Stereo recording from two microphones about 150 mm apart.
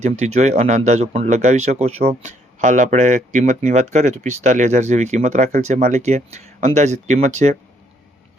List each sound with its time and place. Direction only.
0.0 s speech: 50° right (ahead or behind)